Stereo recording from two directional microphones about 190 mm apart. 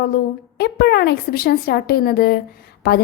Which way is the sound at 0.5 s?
60° left (ahead or behind).